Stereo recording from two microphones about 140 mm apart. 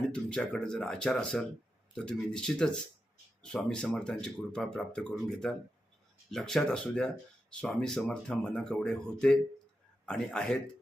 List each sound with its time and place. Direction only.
0.1 s speech: 5° left (ahead or behind)